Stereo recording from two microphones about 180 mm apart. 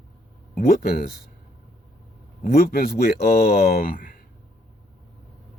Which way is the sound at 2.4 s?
55° left (ahead or behind).